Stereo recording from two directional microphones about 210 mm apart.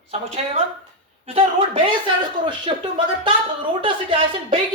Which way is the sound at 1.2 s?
25° right (ahead or behind).